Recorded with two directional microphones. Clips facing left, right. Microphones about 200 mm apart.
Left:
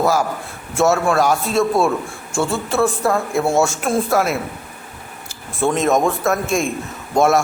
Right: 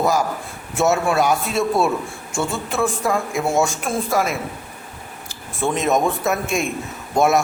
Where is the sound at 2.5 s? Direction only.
15° right (ahead or behind).